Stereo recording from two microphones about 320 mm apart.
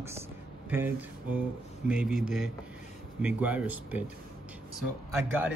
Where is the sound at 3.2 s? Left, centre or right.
Centre.